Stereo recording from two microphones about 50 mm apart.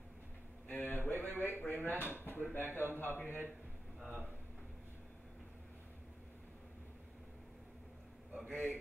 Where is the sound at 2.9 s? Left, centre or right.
Left.